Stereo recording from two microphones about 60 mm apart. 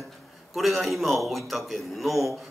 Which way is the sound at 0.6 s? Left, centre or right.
Centre.